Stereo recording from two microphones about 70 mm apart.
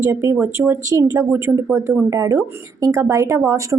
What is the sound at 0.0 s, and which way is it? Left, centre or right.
A woman's voice, right.